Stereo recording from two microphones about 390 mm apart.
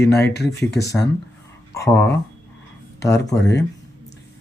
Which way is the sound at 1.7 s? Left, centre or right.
Centre.